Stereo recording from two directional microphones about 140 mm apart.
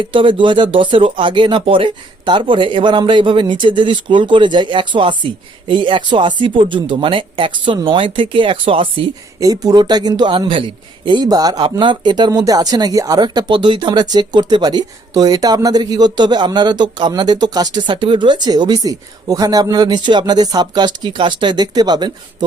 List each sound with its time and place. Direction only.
0.0 s a man's voice: 35° right (ahead or behind)
9.4 s a man's voice: 25° right (ahead or behind)